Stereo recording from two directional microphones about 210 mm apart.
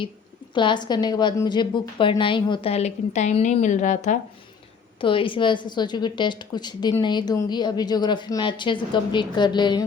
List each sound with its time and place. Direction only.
0.5 s a woman's voice: 20° left (ahead or behind)
4.9 s a woman's voice: 25° left (ahead or behind)